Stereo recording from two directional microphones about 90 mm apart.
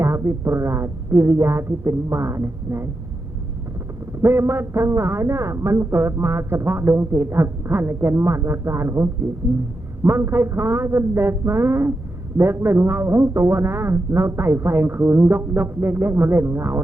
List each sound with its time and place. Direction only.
0.0 s speech: 30° right (ahead or behind)
4.2 s a man's voice: 25° right (ahead or behind)